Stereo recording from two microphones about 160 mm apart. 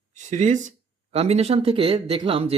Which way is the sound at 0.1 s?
50° right (ahead or behind).